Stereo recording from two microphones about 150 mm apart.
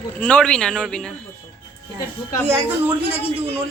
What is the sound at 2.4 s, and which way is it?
Speech, 15° right (ahead or behind).